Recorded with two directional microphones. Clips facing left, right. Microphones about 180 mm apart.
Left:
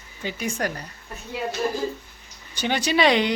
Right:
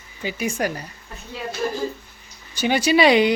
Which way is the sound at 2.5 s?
10° right (ahead or behind).